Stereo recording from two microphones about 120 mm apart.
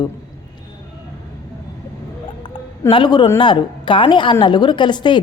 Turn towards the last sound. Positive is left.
turn(degrees=40)  # may be behind; listen again after turning